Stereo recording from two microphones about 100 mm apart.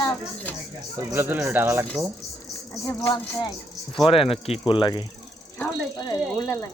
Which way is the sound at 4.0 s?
65° left (ahead or behind).